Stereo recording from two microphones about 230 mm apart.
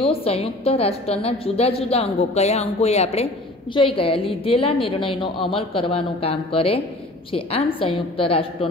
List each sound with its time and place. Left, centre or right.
0.0 s a woman's voice: left